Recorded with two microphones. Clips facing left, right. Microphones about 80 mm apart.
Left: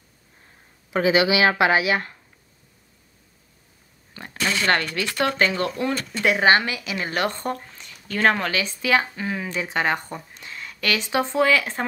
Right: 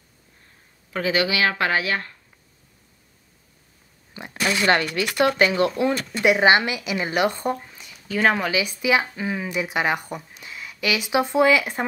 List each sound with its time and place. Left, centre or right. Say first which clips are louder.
0.9 s speech: left 4 dB; centre
4.1 s a sound: right 1 dB; centre
5.1 s speech: right 3 dB; centre
5.9 s speech: right 3 dB; centre